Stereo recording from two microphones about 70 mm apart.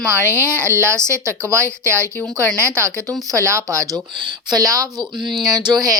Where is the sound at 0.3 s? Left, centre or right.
Right.